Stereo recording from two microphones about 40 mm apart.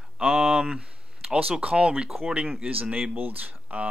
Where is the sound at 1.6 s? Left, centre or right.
Right.